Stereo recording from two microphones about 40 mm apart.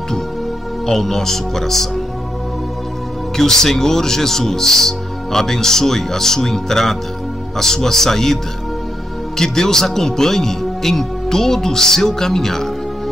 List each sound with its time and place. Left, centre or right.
0.8 s speech: centre
3.3 s speech: centre
9.4 s speech: centre